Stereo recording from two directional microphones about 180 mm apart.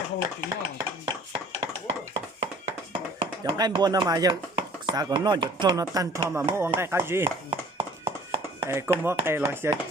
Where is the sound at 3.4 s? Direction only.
25° right (ahead or behind).